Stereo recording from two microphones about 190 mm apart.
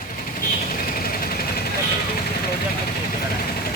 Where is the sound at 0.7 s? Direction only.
50° left (ahead or behind).